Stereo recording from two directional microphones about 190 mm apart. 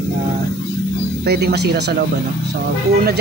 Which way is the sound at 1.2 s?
60° right (ahead or behind).